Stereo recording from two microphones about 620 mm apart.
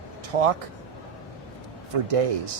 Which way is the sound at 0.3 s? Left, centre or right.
Right.